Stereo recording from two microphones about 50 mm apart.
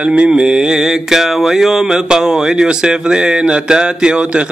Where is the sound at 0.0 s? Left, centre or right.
Right.